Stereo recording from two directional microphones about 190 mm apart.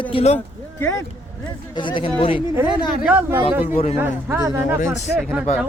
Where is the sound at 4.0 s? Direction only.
10° right (ahead or behind).